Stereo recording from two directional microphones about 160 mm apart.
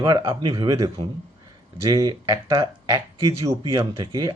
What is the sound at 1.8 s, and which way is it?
Speech, 25° right (ahead or behind).